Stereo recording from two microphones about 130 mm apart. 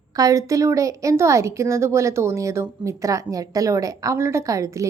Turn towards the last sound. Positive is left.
turn(degrees=-25)  # may be behind; listen again after turning